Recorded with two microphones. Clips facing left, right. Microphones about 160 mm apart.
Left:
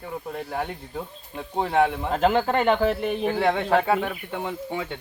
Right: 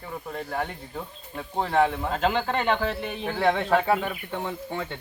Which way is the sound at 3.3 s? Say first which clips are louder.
Even; 10° left (ahead or behind).